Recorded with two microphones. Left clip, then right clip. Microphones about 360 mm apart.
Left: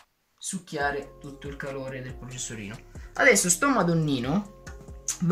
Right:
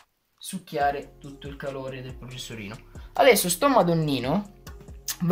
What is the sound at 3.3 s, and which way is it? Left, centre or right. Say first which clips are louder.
Speech: right 3 dB; centre.